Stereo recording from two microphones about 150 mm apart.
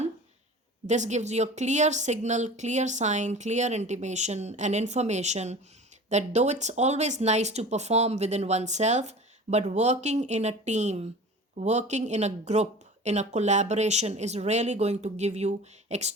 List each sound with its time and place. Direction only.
0.9 s speech: 50° right (ahead or behind)